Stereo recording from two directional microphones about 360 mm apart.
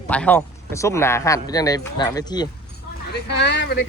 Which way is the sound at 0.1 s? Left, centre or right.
Centre.